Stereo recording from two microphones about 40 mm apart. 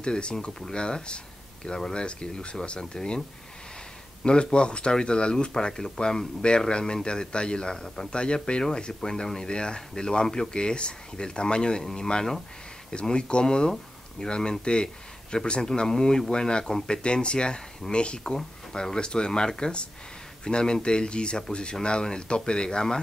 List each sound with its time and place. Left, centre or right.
0.0 s speech: left
1.7 s speech: centre
2.0 s speech: left
4.2 s speech: left